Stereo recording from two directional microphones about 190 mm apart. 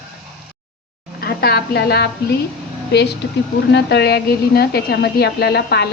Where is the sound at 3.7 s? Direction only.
60° left (ahead or behind).